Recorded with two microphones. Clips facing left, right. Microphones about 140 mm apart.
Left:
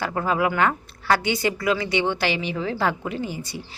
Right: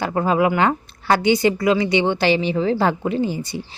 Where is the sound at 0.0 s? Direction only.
25° right (ahead or behind).